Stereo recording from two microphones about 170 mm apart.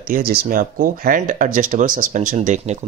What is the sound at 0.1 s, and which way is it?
Speech, 60° right (ahead or behind).